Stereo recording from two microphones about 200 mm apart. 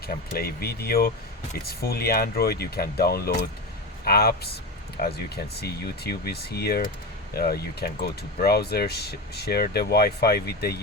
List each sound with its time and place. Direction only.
0.3 s speech: 50° left (ahead or behind)